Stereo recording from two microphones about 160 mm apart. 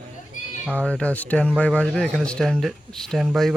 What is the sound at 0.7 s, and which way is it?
Speech, 5° left (ahead or behind).